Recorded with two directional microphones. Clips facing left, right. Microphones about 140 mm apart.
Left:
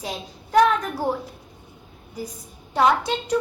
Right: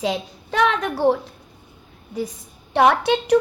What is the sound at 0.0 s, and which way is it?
A child's voice, 90° right.